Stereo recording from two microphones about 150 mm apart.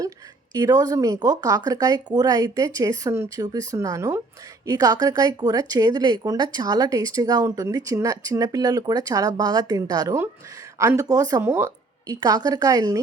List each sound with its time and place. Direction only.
0.5 s a woman's voice: 20° right (ahead or behind)